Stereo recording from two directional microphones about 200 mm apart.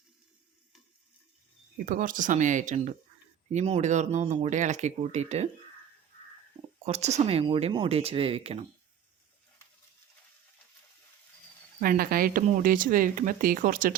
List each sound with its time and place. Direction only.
1.9 s speech: 40° right (ahead or behind)
6.8 s speech: 35° right (ahead or behind)
11.8 s speech: 45° right (ahead or behind)